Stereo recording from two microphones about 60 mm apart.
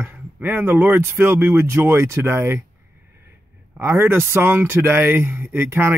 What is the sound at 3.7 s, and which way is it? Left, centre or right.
Speech, right.